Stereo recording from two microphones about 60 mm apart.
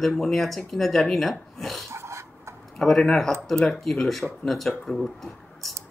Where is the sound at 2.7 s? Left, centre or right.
Centre.